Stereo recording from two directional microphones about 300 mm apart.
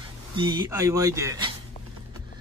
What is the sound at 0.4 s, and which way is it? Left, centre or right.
Speech, centre.